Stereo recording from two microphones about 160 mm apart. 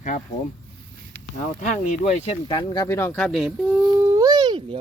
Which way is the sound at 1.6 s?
45° left (ahead or behind).